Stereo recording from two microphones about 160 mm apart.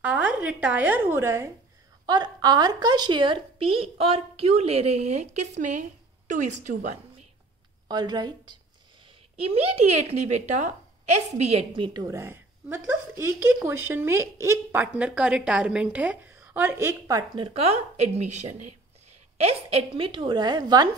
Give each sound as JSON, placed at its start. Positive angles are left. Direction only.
{"t": 0.0, "sound": "a woman's voice", "side_deg": -10}
{"t": 7.9, "sound": "speech", "side_deg": -25}
{"t": 9.4, "sound": "a woman's voice", "side_deg": -40}
{"t": 17.4, "sound": "a woman's voice", "side_deg": -40}